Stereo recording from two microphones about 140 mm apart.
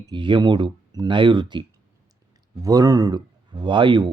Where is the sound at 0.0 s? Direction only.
30° right (ahead or behind).